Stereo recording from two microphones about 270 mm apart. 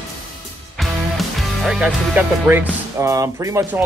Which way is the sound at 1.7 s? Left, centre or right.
Centre.